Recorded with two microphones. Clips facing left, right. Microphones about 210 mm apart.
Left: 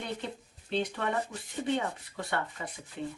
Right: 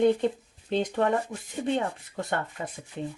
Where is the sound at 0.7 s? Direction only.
45° right (ahead or behind).